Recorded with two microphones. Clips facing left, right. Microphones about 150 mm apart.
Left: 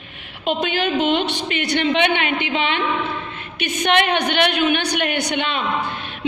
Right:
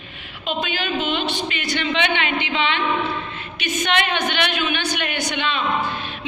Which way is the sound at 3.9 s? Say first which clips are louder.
Left 5 dB; 55° left (ahead or behind).